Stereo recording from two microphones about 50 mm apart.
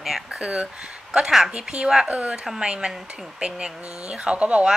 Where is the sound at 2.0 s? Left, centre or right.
Right.